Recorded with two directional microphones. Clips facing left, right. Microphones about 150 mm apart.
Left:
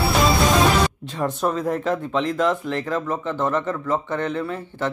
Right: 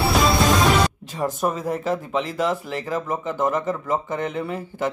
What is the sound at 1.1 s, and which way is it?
Speech, 5° right (ahead or behind).